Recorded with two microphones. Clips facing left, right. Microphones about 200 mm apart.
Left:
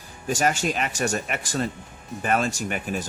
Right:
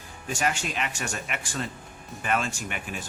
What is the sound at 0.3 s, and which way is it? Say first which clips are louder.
Speech: left 5 dB; 40° left (ahead or behind).